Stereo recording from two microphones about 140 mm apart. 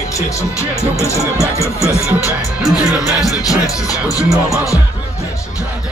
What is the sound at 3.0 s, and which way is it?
Music, 25° left (ahead or behind).